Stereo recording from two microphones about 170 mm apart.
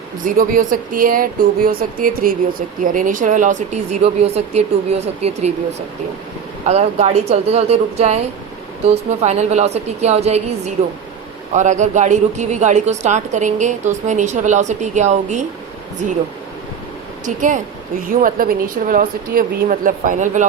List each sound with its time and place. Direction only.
0.3 s speech: 55° right (ahead or behind); by 5.5 s 40° right (ahead or behind)
6.7 s speech: 40° right (ahead or behind)
17.2 s speech: 50° right (ahead or behind)